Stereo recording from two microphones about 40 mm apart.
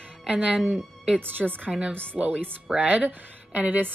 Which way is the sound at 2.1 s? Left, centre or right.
Right.